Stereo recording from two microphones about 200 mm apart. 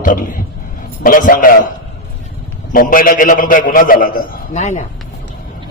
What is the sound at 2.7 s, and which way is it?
A man's voice, 45° left (ahead or behind).